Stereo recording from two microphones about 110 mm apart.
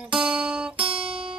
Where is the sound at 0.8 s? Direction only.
55° right (ahead or behind).